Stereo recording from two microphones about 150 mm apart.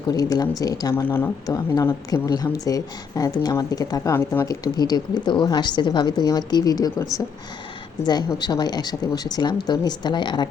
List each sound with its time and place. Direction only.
0.1 s speech: 25° left (ahead or behind)
8.4 s speech: 25° left (ahead or behind)